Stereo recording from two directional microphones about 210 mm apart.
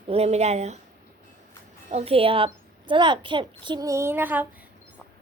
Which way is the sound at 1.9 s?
25° right (ahead or behind).